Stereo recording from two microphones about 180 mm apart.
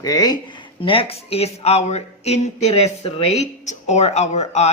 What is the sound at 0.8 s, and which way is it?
Speech, 30° left (ahead or behind).